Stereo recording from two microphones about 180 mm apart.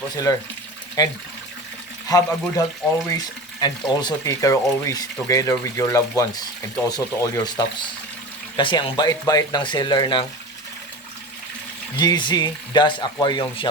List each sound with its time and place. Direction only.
0.1 s speech: 20° left (ahead or behind)
11.9 s speech: 25° left (ahead or behind)